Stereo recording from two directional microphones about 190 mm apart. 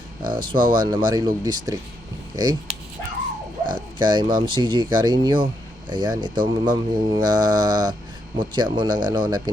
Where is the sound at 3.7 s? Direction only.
25° right (ahead or behind).